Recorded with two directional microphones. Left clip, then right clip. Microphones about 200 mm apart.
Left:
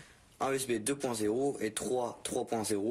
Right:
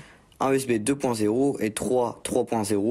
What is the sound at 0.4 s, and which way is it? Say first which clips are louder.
Speech: right 9 dB; 40° right (ahead or behind).